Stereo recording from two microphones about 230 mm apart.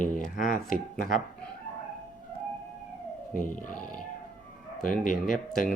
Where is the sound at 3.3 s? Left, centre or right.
Left.